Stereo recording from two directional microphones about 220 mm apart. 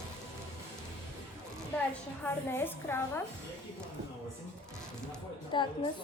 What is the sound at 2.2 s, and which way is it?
A woman's voice, 10° left (ahead or behind).